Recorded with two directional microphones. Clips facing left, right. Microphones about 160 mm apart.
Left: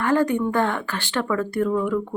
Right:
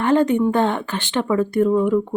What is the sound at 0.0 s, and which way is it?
Speech, 20° right (ahead or behind).